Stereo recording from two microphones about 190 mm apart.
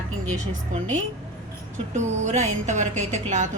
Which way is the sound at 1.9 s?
40° right (ahead or behind).